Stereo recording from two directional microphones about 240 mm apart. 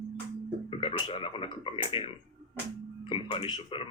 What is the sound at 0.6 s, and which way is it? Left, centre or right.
Speech, left.